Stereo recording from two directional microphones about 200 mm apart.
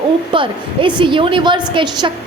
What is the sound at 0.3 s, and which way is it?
A woman's voice, 25° right (ahead or behind).